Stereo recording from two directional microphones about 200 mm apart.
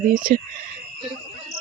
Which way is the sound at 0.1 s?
40° right (ahead or behind).